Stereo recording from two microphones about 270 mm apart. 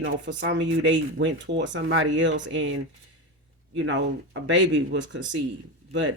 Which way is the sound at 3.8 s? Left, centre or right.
Right.